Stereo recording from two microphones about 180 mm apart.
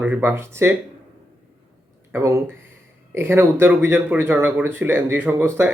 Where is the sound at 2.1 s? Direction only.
15° right (ahead or behind).